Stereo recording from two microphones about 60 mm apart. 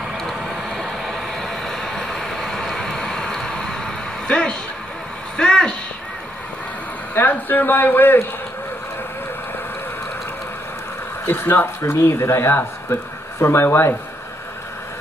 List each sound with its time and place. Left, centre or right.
0.2 s vehicle: centre
5.4 s a sound: centre
7.2 s a man's voice: left
11.2 s speech: left